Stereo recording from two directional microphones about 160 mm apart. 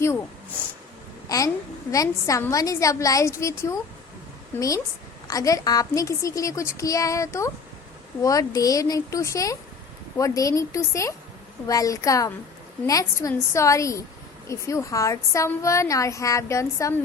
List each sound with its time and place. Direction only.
1.3 s a child's voice: 20° left (ahead or behind)